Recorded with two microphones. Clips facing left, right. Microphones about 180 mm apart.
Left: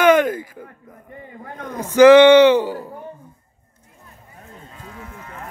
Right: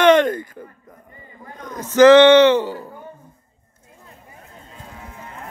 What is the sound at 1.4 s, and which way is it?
Speech, 55° left (ahead or behind).